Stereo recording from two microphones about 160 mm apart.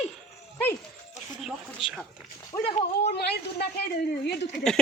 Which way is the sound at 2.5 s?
15° left (ahead or behind).